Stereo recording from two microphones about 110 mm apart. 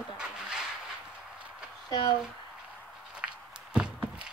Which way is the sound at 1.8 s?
40° left (ahead or behind).